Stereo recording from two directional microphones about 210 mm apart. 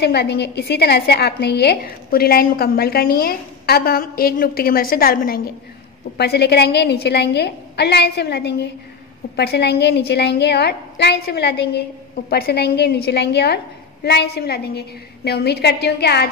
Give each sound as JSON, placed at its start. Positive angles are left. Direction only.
{"t": 0.0, "sound": "a woman's voice", "side_deg": 50}